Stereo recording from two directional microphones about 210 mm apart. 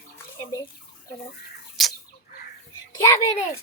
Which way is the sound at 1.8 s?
Centre (ahead or behind).